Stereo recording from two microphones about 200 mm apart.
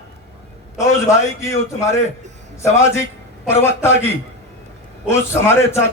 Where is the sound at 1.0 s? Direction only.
15° left (ahead or behind).